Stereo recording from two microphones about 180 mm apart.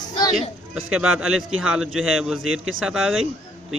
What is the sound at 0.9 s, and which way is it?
A man's voice, 5° right (ahead or behind).